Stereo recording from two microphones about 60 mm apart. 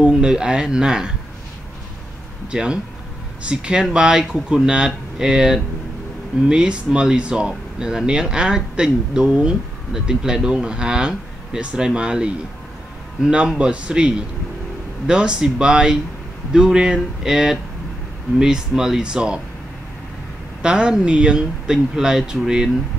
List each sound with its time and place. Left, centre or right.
0.0 s speech: centre
2.4 s speech: centre
20.6 s speech: centre